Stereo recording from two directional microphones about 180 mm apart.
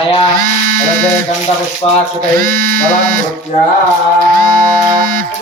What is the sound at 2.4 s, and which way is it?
Speech, 50° right (ahead or behind).